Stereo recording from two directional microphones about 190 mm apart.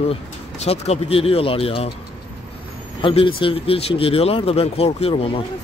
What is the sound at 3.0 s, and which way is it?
Speech, 30° left (ahead or behind).